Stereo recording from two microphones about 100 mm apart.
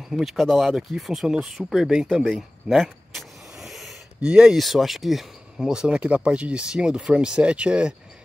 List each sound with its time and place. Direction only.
0.1 s speech: centre (ahead or behind)
2.7 s vehicle: centre (ahead or behind)
4.3 s speech: 5° right (ahead or behind)